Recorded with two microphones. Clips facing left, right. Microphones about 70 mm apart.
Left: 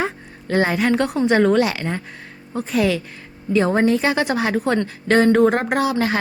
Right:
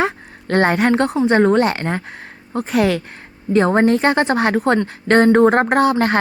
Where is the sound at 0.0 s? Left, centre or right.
Right.